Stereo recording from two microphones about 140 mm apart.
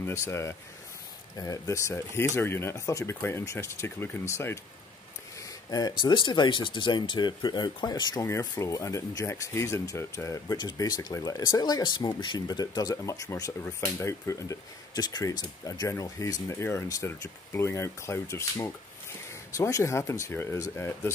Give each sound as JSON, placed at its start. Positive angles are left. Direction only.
{"t": 0.0, "sound": "speech", "side_deg": 20}
{"t": 5.7, "sound": "speech", "side_deg": 25}